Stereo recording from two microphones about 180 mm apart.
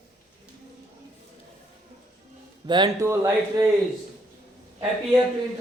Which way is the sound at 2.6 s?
25° right (ahead or behind).